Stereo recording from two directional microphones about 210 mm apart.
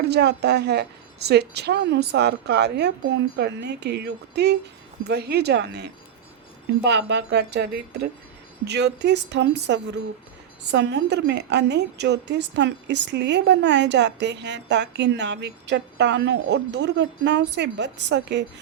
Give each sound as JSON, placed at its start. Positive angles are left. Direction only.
{"t": 0.0, "sound": "a woman's voice", "side_deg": -50}